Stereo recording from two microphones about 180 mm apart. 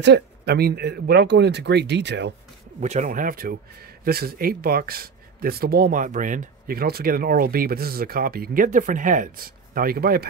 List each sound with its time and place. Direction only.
0.0 s speech: 65° right (ahead or behind)
2.8 s speech: 40° right (ahead or behind); by 10.2 s 55° right (ahead or behind)